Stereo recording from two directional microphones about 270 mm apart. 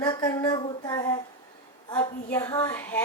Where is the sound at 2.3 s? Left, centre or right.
Centre.